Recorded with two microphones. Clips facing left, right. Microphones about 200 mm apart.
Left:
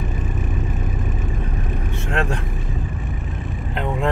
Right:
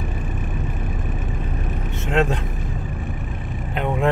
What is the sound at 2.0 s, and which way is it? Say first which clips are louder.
Speech: right 4 dB; 20° right (ahead or behind).